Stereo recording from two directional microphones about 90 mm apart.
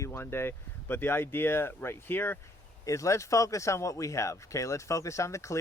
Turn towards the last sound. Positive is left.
turn(degrees=35)  # may be behind; listen again after turning